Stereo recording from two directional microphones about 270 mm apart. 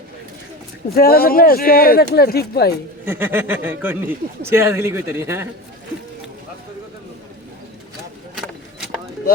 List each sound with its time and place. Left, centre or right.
0.9 s speech: left
3.1 s speech: centre
8.4 s vehicle: centre